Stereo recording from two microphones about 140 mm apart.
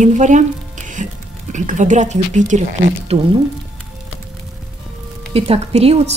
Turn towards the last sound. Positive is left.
turn(degrees=-50)  # may be behind; listen again after turning